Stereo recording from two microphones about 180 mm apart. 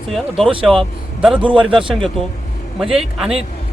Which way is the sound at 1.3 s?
30° right (ahead or behind).